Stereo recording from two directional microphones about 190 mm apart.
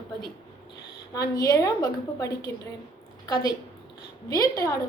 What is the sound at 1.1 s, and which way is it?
A woman's voice, 20° left (ahead or behind).